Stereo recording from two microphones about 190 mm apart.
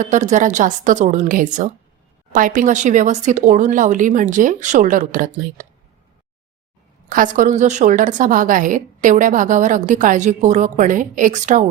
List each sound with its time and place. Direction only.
0.0 s a woman's voice: 40° right (ahead or behind)
7.1 s a woman's voice: 45° right (ahead or behind)